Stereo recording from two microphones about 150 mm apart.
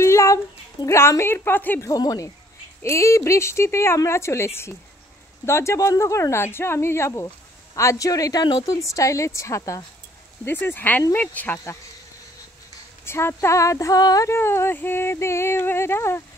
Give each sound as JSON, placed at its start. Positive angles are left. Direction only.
{"t": 0.0, "sound": "a woman's voice", "side_deg": 20}
{"t": 1.9, "sound": "speech", "side_deg": 25}
{"t": 10.4, "sound": "speech", "side_deg": 15}
{"t": 13.0, "sound": "speech", "side_deg": 15}